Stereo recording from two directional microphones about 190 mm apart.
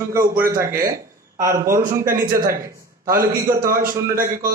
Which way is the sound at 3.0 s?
50° right (ahead or behind).